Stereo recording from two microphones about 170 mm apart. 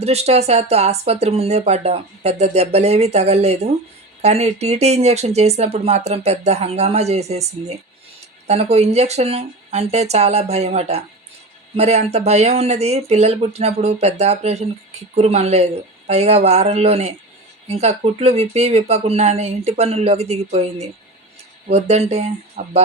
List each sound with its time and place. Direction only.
0.0 s speech: 40° right (ahead or behind)
22.6 s speech: 50° right (ahead or behind)